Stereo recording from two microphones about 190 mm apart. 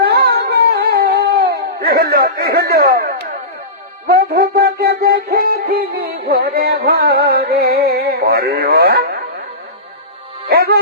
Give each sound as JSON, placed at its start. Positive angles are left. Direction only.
{"t": 0.0, "sound": "a sound", "side_deg": -55}
{"t": 4.0, "sound": "music", "side_deg": -55}
{"t": 10.5, "sound": "speech", "side_deg": -55}